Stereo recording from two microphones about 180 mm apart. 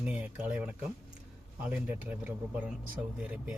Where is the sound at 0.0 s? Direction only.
10° right (ahead or behind).